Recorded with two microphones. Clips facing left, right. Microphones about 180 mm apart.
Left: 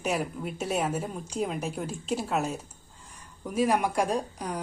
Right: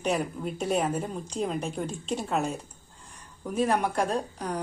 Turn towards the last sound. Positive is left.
turn(degrees=10)  # may be behind; listen again after turning